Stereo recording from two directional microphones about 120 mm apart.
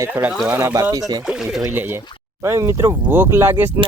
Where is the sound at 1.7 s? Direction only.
15° right (ahead or behind).